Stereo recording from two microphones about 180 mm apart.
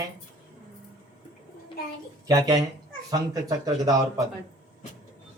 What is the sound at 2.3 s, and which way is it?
A man's voice, 20° right (ahead or behind).